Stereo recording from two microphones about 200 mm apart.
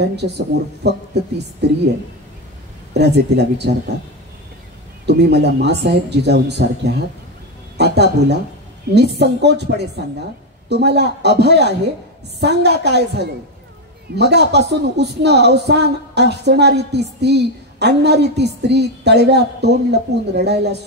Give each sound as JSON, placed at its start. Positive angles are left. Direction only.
{"t": 0.0, "sound": "a woman's voice", "side_deg": -55}
{"t": 2.9, "sound": "a woman's voice", "side_deg": -55}
{"t": 5.0, "sound": "a woman's voice", "side_deg": -55}